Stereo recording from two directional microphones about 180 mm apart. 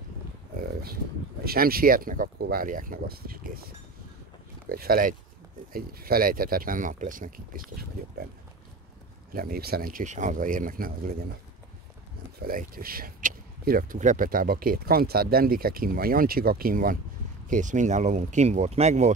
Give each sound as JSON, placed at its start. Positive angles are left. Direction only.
{"t": 1.4, "sound": "speech", "side_deg": -55}
{"t": 9.3, "sound": "speech", "side_deg": -55}
{"t": 12.4, "sound": "speech", "side_deg": -55}